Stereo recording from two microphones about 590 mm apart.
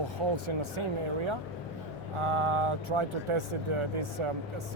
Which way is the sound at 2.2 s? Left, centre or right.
Right.